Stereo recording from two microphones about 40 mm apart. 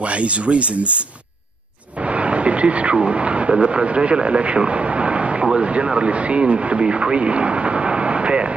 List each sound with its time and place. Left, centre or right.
0.0 s speech: right
2.0 s a man's voice: right